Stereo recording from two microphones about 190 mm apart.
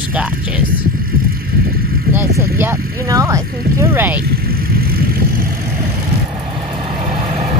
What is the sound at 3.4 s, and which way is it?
Speech, 50° right (ahead or behind).